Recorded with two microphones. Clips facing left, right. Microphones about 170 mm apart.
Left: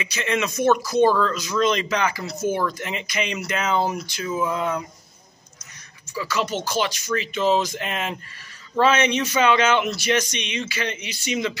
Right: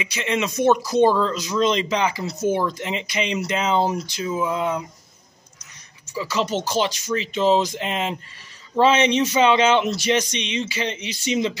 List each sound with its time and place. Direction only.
0.0 s speech: 20° right (ahead or behind)
4.2 s speech: 15° right (ahead or behind)
6.1 s speech: 20° right (ahead or behind)